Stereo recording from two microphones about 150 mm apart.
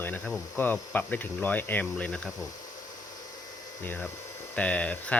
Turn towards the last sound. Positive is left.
turn(degrees=10)  # may be behind; listen again after turning